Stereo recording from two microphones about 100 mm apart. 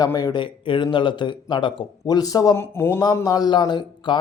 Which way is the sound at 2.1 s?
40° left (ahead or behind).